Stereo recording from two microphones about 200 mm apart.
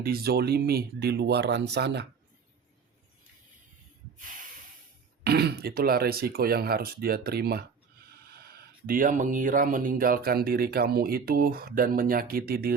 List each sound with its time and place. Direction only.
0.0 s speech: 50° right (ahead or behind)
5.2 s speech: 55° right (ahead or behind)
8.9 s speech: 40° right (ahead or behind)